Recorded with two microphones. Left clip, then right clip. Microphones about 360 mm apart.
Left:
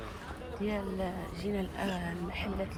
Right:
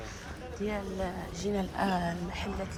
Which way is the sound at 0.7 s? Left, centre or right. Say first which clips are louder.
Even; centre.